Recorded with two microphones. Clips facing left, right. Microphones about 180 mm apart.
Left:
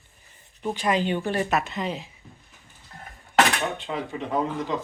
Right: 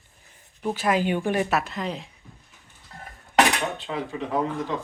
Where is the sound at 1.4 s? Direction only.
Centre (ahead or behind).